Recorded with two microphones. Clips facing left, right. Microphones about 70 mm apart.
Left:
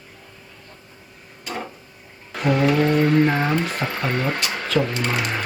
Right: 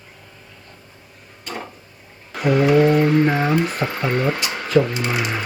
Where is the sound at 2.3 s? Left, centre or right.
Centre.